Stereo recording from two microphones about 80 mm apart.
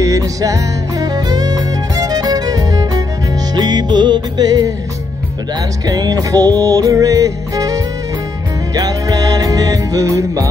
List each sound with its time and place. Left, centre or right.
0.0 s music: right
5.9 s music: right